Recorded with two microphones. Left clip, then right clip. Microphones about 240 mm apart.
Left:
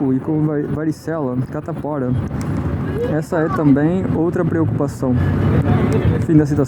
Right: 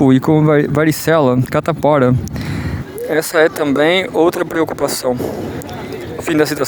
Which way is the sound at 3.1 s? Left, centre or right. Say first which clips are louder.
Right 9 dB; right.